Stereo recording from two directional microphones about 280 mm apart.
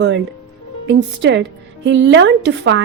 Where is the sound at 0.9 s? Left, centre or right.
Right.